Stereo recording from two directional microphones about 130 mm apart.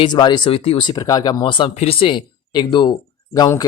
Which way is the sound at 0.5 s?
45° left (ahead or behind).